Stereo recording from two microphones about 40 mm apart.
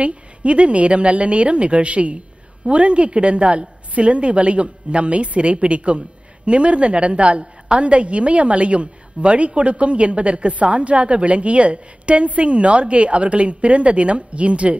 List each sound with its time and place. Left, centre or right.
0.0 s a woman's voice: right